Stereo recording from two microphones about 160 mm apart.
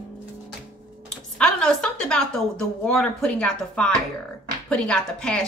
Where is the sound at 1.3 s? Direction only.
5° left (ahead or behind).